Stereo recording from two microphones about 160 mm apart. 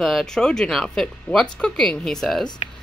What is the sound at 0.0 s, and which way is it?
Speech, centre (ahead or behind).